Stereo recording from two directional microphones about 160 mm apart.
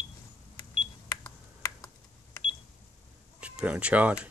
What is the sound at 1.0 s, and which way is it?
Computer keyboard, 20° left (ahead or behind).